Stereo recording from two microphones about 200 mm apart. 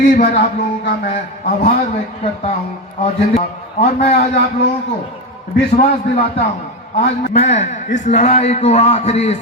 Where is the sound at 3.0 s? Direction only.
30° left (ahead or behind).